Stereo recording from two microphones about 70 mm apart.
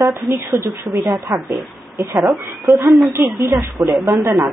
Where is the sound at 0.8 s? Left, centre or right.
Right.